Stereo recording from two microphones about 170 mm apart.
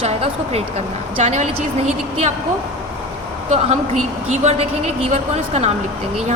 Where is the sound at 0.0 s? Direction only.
40° right (ahead or behind).